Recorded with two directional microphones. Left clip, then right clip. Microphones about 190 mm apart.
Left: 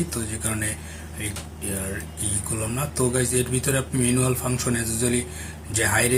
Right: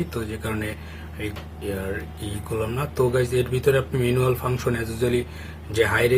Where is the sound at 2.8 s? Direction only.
45° right (ahead or behind).